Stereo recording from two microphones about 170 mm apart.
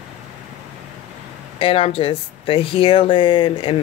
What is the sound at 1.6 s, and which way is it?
Speech, 35° left (ahead or behind).